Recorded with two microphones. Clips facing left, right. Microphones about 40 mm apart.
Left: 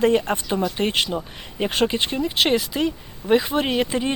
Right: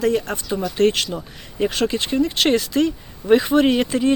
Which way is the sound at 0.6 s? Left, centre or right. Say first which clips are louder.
Right 7 dB; centre.